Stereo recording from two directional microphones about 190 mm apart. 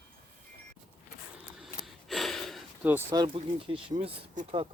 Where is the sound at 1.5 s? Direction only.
Centre (ahead or behind).